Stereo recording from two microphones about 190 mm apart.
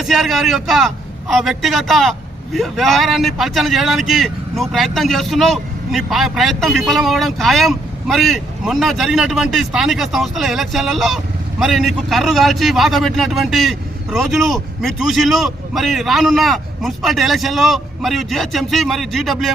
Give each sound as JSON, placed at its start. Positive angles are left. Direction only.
{"t": 0.0, "sound": "a man's voice", "side_deg": 0}